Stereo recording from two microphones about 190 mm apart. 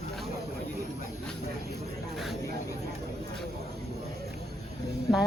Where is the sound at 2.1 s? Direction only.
Centre (ahead or behind).